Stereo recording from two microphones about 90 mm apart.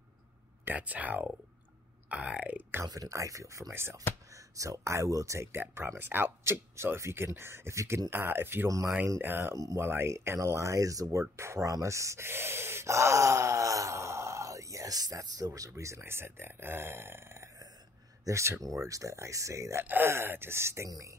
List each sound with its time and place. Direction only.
0.7 s speech: 15° right (ahead or behind)
2.8 s speech: 40° right (ahead or behind)
8.6 s speech: 35° right (ahead or behind)
9.0 s speech: 25° right (ahead or behind)
9.6 s speech: 40° right (ahead or behind)